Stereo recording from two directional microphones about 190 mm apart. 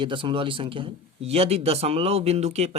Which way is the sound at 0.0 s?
25° right (ahead or behind).